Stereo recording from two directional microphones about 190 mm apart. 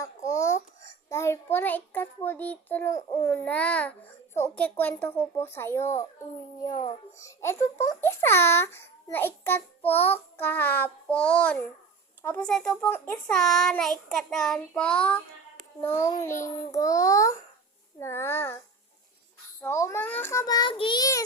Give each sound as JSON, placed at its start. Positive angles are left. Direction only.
{"t": 0.3, "sound": "babbling", "side_deg": 15}
{"t": 1.1, "sound": "a sound", "side_deg": 15}
{"t": 1.5, "sound": "a child's voice", "side_deg": 10}
{"t": 7.2, "sound": "a child's voice", "side_deg": 15}
{"t": 19.6, "sound": "a child's voice", "side_deg": 15}